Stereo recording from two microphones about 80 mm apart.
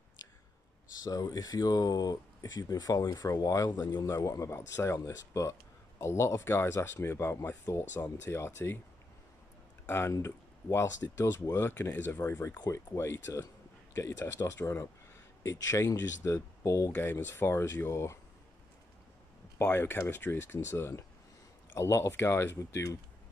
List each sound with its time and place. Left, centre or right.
1.0 s speech: left
9.8 s speech: left
16.9 s speech: left
19.6 s speech: left